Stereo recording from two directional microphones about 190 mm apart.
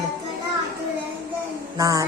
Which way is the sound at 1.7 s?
15° right (ahead or behind).